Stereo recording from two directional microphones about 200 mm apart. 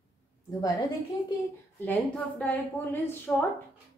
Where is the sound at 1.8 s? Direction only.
10° left (ahead or behind).